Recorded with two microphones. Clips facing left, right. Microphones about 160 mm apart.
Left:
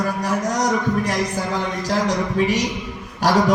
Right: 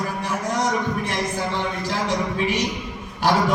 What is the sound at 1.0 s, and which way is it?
A man's voice, 40° left (ahead or behind).